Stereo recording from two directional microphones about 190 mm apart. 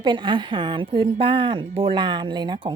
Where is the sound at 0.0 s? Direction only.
25° right (ahead or behind).